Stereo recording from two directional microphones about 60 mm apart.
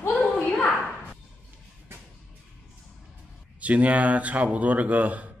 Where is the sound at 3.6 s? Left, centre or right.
Right.